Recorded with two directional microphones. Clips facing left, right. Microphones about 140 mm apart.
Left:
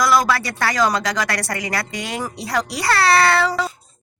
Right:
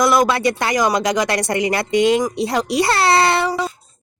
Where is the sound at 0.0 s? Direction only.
20° right (ahead or behind).